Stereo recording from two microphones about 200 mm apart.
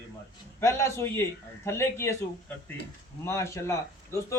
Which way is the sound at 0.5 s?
10° left (ahead or behind).